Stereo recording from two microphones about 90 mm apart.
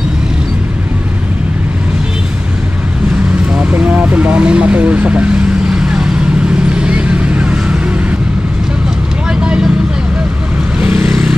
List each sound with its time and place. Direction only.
3.5 s vehicle: 15° right (ahead or behind)
9.4 s vehicle: 10° right (ahead or behind)
10.8 s vehicle: 15° right (ahead or behind)